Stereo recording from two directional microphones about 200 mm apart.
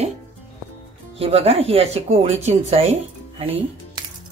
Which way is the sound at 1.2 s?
30° right (ahead or behind).